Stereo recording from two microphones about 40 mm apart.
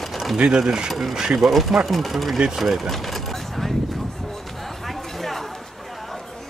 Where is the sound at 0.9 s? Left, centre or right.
Centre.